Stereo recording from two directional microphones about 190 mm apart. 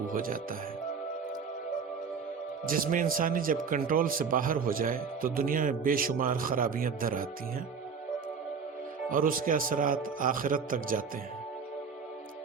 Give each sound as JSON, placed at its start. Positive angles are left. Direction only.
{"t": 0.1, "sound": "speech", "side_deg": -45}
{"t": 2.6, "sound": "speech", "side_deg": -45}
{"t": 9.0, "sound": "speech", "side_deg": -45}